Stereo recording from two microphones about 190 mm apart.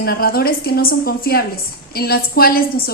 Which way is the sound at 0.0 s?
55° left (ahead or behind).